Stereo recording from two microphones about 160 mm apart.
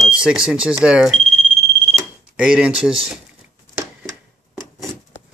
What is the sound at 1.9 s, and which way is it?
Cash register, 5° right (ahead or behind).